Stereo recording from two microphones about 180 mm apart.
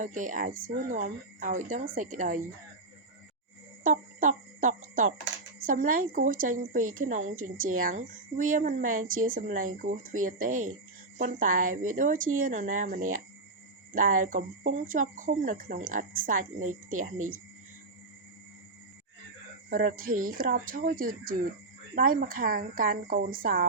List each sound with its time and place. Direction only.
0.0 s a woman's voice: 45° right (ahead or behind)
3.8 s cricket: 45° right (ahead or behind)
5.5 s a woman's voice: 50° right (ahead or behind)
19.7 s a woman's voice: 50° right (ahead or behind)